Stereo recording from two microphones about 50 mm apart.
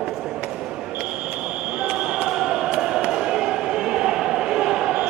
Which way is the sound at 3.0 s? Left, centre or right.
Centre.